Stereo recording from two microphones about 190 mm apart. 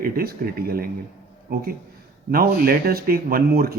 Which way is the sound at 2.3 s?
50° right (ahead or behind).